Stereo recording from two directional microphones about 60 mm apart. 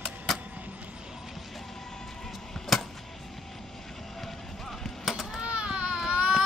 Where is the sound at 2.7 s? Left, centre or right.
Centre.